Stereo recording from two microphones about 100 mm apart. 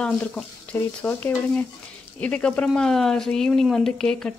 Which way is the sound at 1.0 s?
15° left (ahead or behind).